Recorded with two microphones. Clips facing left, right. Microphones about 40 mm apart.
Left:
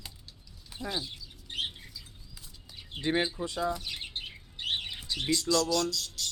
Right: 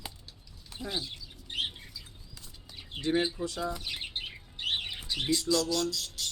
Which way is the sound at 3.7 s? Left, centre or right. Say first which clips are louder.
Even; centre.